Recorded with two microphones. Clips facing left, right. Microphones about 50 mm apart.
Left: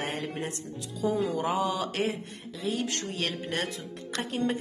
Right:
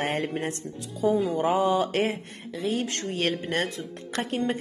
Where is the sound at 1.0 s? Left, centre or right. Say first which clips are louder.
Right 4 dB; right.